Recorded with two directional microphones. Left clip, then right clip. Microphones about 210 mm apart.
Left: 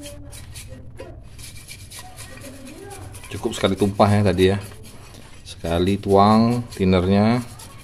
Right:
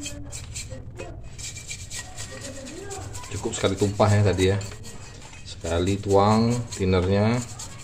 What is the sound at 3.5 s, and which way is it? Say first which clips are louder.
Speech: left 4 dB; 50° left (ahead or behind).